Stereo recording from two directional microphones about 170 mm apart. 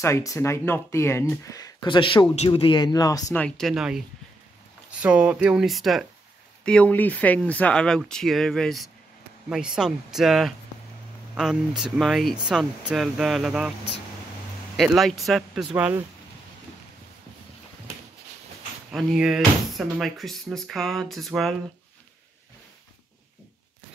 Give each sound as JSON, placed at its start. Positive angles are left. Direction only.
{"t": 0.0, "sound": "speech", "side_deg": 20}
{"t": 3.3, "sound": "speech", "side_deg": 5}
{"t": 5.0, "sound": "speech", "side_deg": -5}
{"t": 14.8, "sound": "speech", "side_deg": 0}
{"t": 15.7, "sound": "speech", "side_deg": -10}
{"t": 18.9, "sound": "speech", "side_deg": -5}